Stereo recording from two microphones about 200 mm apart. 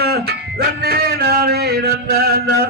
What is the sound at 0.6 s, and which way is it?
Male singing, 50° right (ahead or behind).